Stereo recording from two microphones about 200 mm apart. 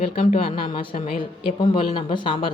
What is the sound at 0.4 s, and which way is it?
Speech, 25° left (ahead or behind).